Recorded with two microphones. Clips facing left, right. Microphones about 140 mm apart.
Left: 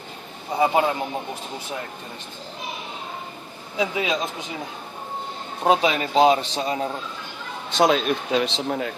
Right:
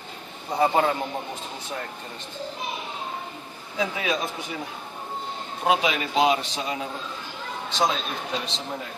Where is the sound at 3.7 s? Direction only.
20° left (ahead or behind).